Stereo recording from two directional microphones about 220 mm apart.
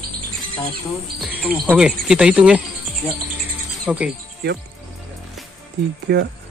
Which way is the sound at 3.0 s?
10° left (ahead or behind).